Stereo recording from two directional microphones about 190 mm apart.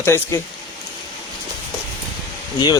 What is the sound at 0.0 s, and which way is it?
Speech, 15° left (ahead or behind).